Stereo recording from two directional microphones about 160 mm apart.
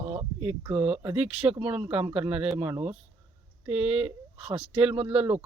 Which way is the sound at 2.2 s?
5° right (ahead or behind).